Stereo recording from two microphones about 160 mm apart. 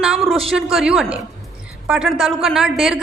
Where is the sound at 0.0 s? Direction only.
Centre (ahead or behind).